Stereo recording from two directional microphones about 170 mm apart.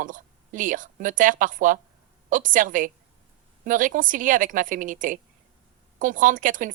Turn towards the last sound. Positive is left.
turn(degrees=-50)  # may be behind; listen again after turning